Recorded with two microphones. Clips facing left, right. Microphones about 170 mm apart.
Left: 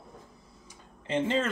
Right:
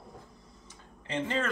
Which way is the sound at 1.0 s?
20° left (ahead or behind).